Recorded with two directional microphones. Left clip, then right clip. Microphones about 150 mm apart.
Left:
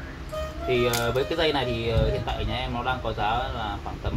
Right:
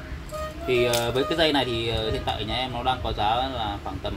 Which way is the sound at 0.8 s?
70° right (ahead or behind).